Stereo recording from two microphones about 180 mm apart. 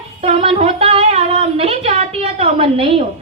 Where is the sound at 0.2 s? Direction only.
30° right (ahead or behind).